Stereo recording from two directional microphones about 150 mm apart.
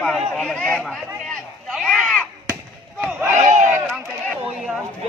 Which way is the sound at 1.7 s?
Centre (ahead or behind).